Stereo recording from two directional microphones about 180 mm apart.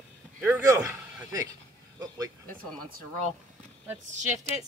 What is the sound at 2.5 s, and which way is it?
Speech, 50° right (ahead or behind).